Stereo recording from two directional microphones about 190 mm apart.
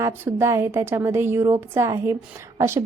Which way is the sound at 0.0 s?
15° right (ahead or behind).